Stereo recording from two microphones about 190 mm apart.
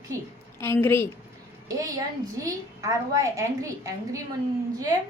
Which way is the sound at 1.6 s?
20° right (ahead or behind).